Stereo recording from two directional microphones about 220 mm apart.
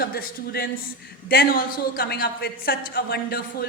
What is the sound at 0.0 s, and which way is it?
A man's voice, 45° left (ahead or behind).